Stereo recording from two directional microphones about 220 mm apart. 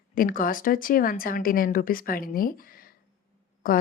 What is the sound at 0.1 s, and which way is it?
Speech, 40° left (ahead or behind).